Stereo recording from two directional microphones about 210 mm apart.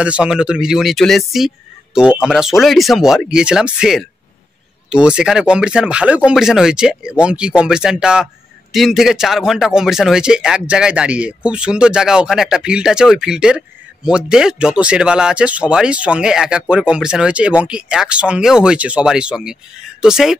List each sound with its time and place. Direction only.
0.0 s a man's voice: 5° right (ahead or behind)